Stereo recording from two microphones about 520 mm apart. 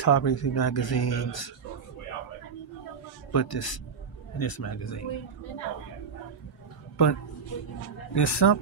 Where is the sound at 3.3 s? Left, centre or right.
Left.